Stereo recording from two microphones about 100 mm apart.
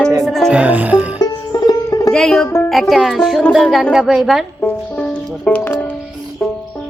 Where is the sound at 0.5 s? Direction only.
15° right (ahead or behind).